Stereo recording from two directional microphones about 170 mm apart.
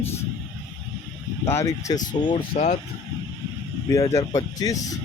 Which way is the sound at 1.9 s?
25° left (ahead or behind).